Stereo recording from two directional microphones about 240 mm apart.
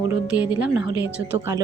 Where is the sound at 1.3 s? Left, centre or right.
Centre.